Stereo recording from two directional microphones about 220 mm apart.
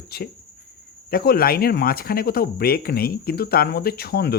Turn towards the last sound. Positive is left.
turn(degrees=45)  # may be behind; listen again after turning